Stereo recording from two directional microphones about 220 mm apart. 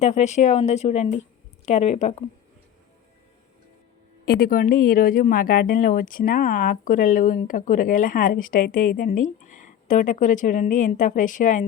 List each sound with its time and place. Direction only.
0.0 s speech: 30° left (ahead or behind)
4.3 s speech: 40° left (ahead or behind)